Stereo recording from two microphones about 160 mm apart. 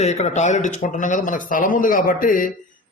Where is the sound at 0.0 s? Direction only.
45° left (ahead or behind).